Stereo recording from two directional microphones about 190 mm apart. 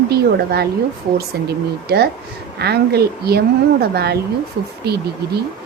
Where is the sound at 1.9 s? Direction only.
55° right (ahead or behind).